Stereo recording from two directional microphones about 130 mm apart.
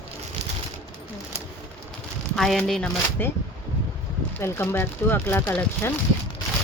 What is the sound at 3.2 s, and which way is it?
Speech, 15° left (ahead or behind).